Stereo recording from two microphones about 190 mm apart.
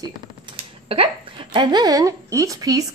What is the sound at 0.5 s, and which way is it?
Speech, 30° right (ahead or behind).